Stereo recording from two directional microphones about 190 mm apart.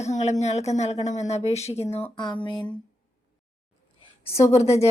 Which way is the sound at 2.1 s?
25° left (ahead or behind).